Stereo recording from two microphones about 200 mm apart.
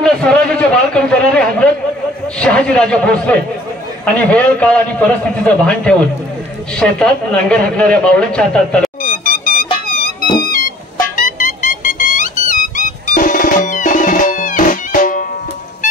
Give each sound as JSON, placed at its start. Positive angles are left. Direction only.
{"t": 0.0, "sound": "a man's voice", "side_deg": 5}
{"t": 9.0, "sound": "a sound", "side_deg": 45}
{"t": 11.1, "sound": "music", "side_deg": 40}